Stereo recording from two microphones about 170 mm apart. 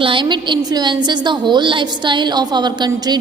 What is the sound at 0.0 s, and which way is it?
A woman's voice, 30° right (ahead or behind).